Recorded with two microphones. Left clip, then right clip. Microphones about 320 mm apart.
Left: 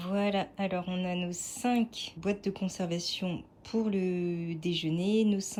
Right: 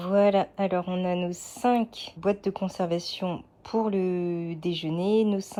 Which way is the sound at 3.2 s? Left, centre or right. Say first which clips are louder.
Right 6 dB; right.